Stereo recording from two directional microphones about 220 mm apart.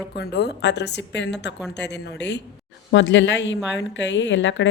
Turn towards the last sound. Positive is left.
turn(degrees=55)  # may be behind; listen again after turning